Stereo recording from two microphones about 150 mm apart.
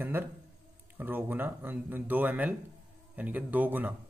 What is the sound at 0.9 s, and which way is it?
Speech, 15° right (ahead or behind).